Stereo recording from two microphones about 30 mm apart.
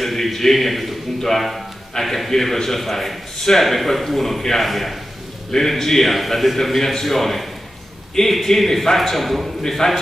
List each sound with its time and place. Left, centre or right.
0.0 s a man's voice: centre
5.5 s a man's voice: centre
8.5 s a man's voice: centre
9.6 s a man's voice: centre